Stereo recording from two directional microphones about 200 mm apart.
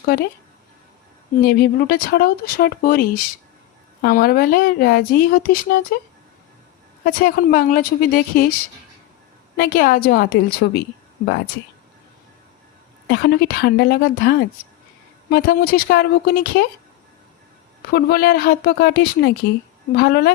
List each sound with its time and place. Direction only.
0.0 s speech: 50° left (ahead or behind)
1.4 s speech: 50° left (ahead or behind)
7.0 s speech: 45° left (ahead or behind)
9.6 s speech: 45° left (ahead or behind)
13.1 s speech: 55° left (ahead or behind)
17.9 s speech: 50° left (ahead or behind)